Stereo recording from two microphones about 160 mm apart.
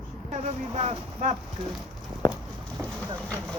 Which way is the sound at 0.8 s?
45° right (ahead or behind).